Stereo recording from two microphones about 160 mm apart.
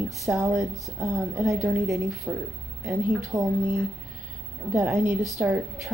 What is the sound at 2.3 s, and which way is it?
A woman's voice, 10° right (ahead or behind).